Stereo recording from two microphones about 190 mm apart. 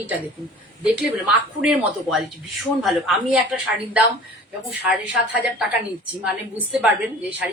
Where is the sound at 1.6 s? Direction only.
5° right (ahead or behind).